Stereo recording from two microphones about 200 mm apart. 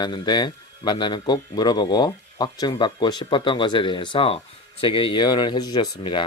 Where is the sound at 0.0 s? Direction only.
20° left (ahead or behind).